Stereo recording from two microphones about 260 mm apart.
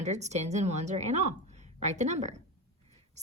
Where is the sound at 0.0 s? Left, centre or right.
Right.